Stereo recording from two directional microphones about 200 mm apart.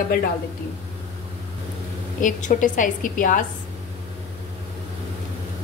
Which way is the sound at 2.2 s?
40° left (ahead or behind).